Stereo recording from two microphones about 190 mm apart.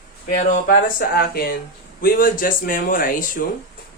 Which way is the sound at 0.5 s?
50° left (ahead or behind).